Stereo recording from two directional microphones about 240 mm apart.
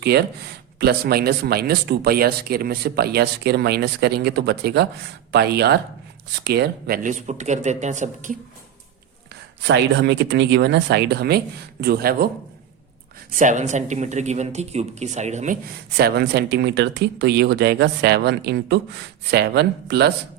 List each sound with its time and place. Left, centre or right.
0.0 s speech: right
9.6 s speech: right
13.3 s speech: right
16.0 s speech: right